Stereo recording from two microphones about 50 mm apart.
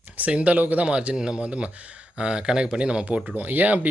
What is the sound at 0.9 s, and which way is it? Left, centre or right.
Speech, right.